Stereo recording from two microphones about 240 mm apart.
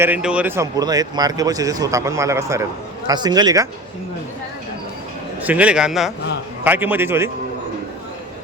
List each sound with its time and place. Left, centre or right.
0.0 s a man's voice: centre
5.4 s a man's voice: centre